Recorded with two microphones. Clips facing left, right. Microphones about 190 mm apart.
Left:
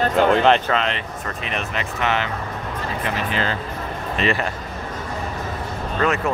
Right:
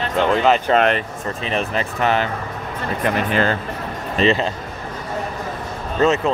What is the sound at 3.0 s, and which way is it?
Speech, 50° right (ahead or behind).